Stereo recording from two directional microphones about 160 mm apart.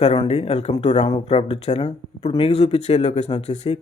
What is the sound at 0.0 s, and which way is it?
Speech, 40° left (ahead or behind).